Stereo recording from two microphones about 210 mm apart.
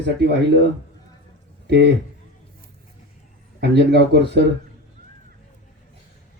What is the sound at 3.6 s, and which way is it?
Speech, 55° right (ahead or behind).